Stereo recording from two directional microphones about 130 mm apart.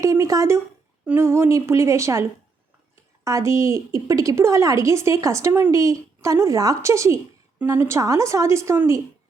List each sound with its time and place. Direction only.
0.0 s a woman's voice: 25° right (ahead or behind)
3.2 s a woman's voice: 25° right (ahead or behind)